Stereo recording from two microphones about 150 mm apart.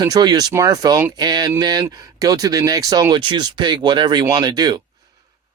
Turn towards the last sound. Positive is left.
turn(degrees=-30)  # may be behind; listen again after turning